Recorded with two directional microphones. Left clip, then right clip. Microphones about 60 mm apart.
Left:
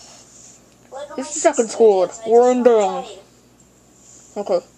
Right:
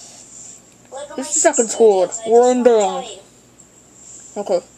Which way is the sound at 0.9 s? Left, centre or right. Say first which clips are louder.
Right 1 dB; centre.